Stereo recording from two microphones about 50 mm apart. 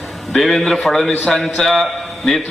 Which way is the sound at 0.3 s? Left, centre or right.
Centre.